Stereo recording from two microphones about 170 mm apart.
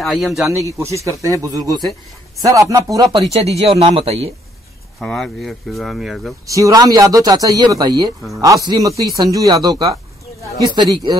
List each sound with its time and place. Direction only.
0.0 s speech: centre (ahead or behind)
0.7 s a man's voice: 20° right (ahead or behind)
3.3 s speech: 40° right (ahead or behind)
5.0 s speech: centre (ahead or behind)
6.4 s a man's voice: 20° right (ahead or behind)